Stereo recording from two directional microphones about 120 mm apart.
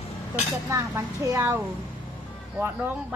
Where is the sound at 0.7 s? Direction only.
25° right (ahead or behind).